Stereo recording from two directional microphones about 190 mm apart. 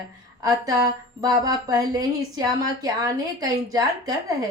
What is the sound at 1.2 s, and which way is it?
A woman's voice, 20° right (ahead or behind).